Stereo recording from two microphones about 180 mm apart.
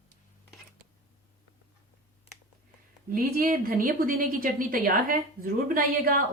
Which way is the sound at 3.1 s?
55° right (ahead or behind).